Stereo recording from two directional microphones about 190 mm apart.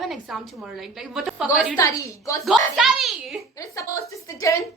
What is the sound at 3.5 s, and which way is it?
A woman's voice, 15° left (ahead or behind).